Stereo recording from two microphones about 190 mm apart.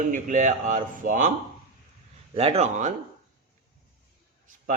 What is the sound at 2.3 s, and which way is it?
Speech, 30° right (ahead or behind).